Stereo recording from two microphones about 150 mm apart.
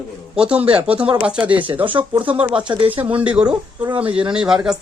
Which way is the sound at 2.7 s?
30° right (ahead or behind).